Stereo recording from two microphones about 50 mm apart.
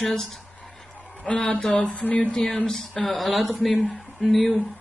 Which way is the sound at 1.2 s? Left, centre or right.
Left.